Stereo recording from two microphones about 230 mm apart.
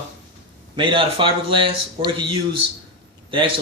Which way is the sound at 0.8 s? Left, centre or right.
Right.